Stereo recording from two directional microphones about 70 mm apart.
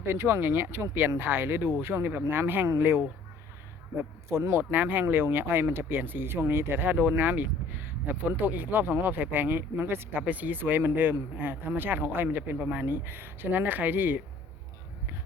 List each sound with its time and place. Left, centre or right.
0.0 s a man's voice: right
4.7 s speech: right
12.8 s speech: right